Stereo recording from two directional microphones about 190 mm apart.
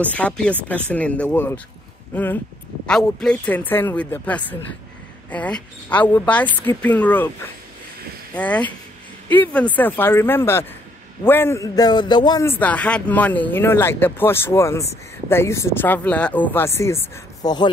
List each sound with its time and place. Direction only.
0.0 s speech: 5° left (ahead or behind)
2.9 s speech: 5° left (ahead or behind)
8.4 s a man's voice: 5° left (ahead or behind); by 12.4 s 25° left (ahead or behind)
12.4 s speech: 10° left (ahead or behind)